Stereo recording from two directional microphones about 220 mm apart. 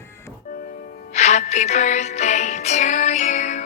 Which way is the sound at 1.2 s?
30° left (ahead or behind).